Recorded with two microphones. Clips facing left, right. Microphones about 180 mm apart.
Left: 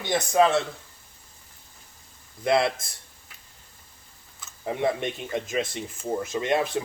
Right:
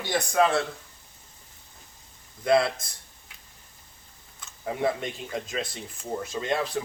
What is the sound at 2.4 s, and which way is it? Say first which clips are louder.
Speech: even; 25° left (ahead or behind).